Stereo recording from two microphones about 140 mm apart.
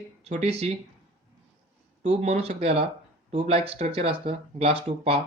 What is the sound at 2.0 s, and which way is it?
Speech, 50° right (ahead or behind).